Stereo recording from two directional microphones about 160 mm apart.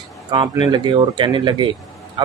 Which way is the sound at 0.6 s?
30° right (ahead or behind).